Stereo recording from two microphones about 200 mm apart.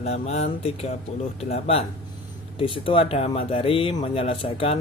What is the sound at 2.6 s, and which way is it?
Speech, 25° left (ahead or behind).